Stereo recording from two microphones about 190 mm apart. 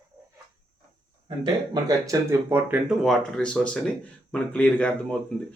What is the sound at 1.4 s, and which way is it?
Speech, 20° right (ahead or behind).